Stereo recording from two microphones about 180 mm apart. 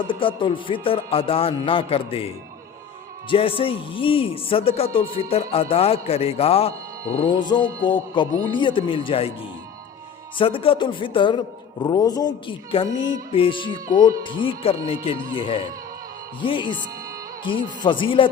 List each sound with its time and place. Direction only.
0.0 s music: 30° left (ahead or behind)
3.2 s a man's voice: 30° left (ahead or behind)
7.3 s music: 25° left (ahead or behind)
10.3 s music: 30° left (ahead or behind)